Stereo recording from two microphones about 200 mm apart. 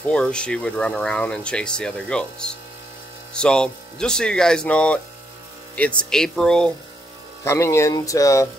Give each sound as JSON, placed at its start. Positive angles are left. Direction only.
{"t": 0.0, "sound": "speech", "side_deg": 5}